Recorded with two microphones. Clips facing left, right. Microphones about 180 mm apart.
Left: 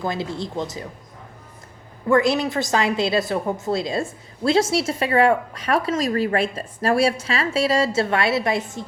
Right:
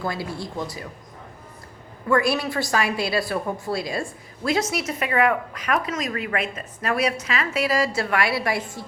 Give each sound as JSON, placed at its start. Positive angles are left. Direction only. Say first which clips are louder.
{"t": 0.0, "sound": "a woman's voice", "louder": "left 3 dB", "side_deg": 20}
{"t": 2.0, "sound": "a woman's voice", "louder": "left 3 dB", "side_deg": 20}